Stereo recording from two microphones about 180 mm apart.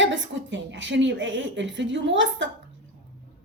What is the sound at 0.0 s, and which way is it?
A woman's voice, 85° right.